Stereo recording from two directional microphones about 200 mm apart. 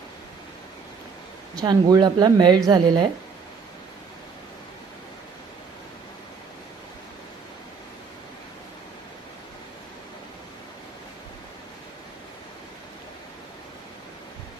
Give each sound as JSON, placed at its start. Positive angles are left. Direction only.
{"t": 1.5, "sound": "speech", "side_deg": -20}